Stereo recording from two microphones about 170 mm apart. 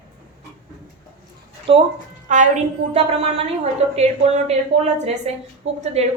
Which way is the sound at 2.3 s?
45° right (ahead or behind).